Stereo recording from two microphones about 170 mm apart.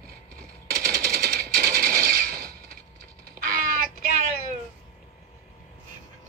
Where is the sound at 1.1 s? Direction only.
65° right (ahead or behind).